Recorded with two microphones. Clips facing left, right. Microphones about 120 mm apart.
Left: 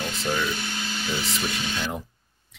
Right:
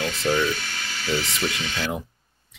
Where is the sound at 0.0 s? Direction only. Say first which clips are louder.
Right 4 dB; 5° left (ahead or behind).